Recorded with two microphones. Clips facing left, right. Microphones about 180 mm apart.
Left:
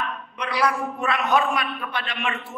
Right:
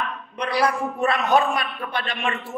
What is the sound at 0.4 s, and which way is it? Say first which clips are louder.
A man's voice: right 2 dB; 35° right (ahead or behind).